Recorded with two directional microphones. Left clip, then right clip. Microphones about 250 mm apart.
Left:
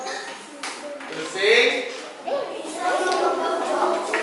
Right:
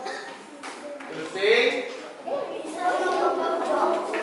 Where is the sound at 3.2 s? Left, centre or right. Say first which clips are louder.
Left 2 dB; right.